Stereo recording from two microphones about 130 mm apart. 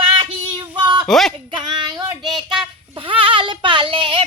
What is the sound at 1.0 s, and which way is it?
Speech, centre (ahead or behind).